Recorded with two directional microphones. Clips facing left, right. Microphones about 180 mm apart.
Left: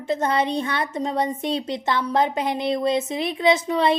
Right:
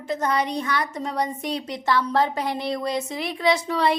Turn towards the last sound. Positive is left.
turn(degrees=20)  # may be behind; listen again after turning